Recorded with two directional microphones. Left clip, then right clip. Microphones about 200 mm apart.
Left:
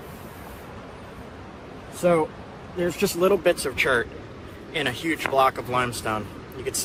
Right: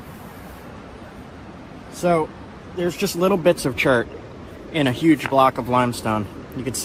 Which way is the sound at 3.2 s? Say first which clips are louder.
Right 3 dB; 15° right (ahead or behind).